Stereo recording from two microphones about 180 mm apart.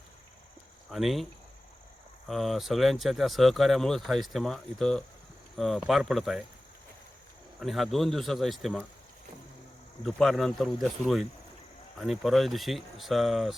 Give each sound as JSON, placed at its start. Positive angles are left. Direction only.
{"t": 0.9, "sound": "speech", "side_deg": 0}
{"t": 7.6, "sound": "speech", "side_deg": 0}
{"t": 10.0, "sound": "speech", "side_deg": 0}